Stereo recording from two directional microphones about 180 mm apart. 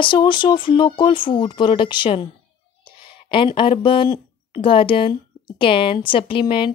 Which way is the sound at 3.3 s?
30° left (ahead or behind).